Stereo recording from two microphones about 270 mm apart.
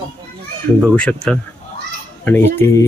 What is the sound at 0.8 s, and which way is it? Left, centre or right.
Speech, centre.